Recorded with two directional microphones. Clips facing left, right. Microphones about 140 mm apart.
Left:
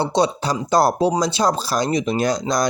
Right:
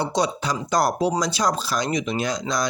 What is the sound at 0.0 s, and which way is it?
Speech, 25° left (ahead or behind).